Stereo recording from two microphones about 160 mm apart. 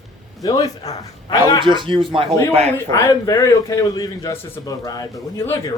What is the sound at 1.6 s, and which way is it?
Speech, 30° right (ahead or behind).